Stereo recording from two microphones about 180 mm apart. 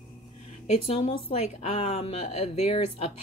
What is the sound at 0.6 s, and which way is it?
A woman's voice, 35° left (ahead or behind).